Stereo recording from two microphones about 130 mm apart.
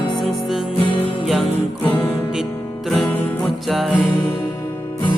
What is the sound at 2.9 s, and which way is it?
Music, centre (ahead or behind).